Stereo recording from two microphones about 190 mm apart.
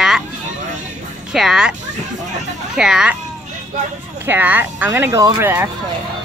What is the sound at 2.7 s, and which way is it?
Speech, 5° right (ahead or behind).